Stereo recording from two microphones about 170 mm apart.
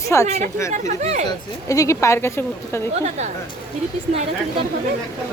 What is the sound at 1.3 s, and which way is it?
A woman's voice, 20° left (ahead or behind).